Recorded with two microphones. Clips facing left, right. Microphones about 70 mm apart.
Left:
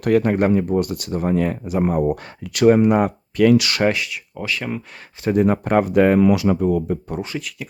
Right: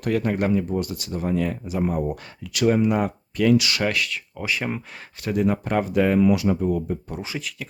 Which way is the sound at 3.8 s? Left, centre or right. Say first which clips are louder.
Left 5 dB; left.